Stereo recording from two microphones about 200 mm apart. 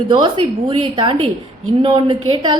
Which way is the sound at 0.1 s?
25° right (ahead or behind).